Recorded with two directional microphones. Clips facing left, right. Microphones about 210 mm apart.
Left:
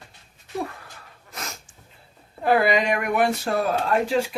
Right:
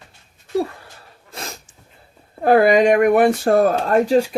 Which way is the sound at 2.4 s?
50° right (ahead or behind).